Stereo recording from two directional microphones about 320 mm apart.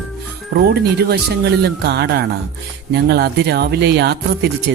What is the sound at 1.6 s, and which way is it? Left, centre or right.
Speech, right.